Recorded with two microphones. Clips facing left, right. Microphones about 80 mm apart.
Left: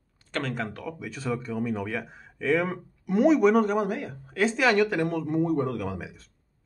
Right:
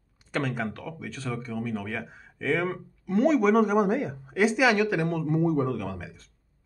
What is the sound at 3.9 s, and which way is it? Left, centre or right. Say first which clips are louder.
Speech: right 5 dB; right.